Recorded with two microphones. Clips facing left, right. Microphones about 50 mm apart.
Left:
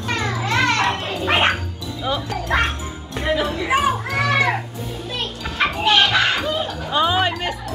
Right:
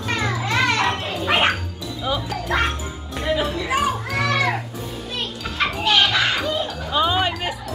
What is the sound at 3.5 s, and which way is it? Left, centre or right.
Speech, centre.